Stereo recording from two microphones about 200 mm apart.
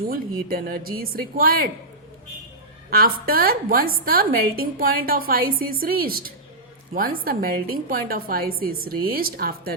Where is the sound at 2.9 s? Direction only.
50° right (ahead or behind).